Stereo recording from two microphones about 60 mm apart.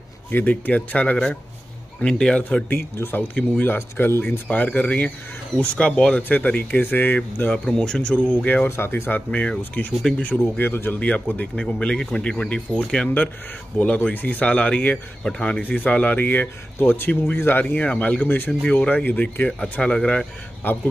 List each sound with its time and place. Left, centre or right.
0.3 s speech: left
2.7 s speech: left
4.5 s speech: left
7.5 s speech: centre
8.6 s speech: left
9.3 s speech: left
10.6 s speech: left
11.0 s speech: left
15.2 s speech: centre
15.6 s speech: left
19.8 s speech: centre
20.6 s speech: left